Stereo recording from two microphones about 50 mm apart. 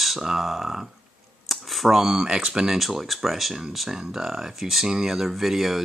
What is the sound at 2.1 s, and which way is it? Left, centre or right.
Speech, centre.